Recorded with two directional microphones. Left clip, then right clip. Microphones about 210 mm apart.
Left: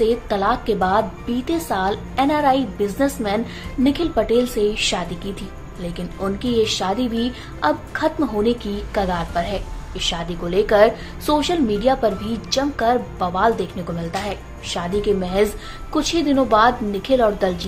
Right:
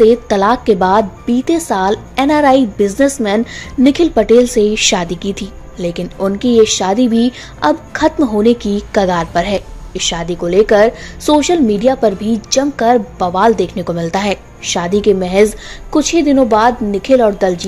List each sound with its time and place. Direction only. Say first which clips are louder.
0.0 s a woman's voice: right 9 dB; 35° right (ahead or behind)